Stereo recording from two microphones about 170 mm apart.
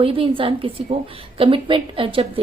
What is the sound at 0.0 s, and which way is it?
A woman's voice, 30° right (ahead or behind).